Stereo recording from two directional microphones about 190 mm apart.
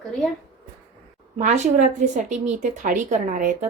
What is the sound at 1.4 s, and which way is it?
A woman's voice, 40° right (ahead or behind).